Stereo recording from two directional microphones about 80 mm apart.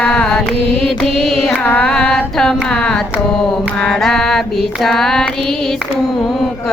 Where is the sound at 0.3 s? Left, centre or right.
Centre.